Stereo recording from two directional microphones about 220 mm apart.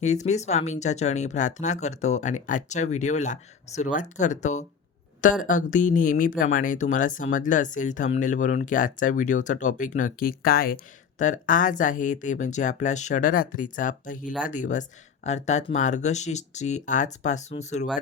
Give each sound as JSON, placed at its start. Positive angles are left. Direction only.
{"t": 0.0, "sound": "speech", "side_deg": 30}